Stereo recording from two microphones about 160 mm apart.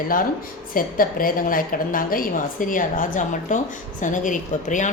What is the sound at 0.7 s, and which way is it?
A woman's voice, 60° left (ahead or behind).